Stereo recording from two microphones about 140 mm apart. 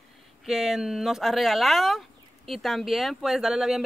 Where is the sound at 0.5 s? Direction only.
5° right (ahead or behind).